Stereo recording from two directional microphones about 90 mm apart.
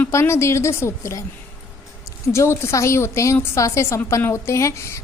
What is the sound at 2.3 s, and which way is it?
A woman's voice, 30° left (ahead or behind).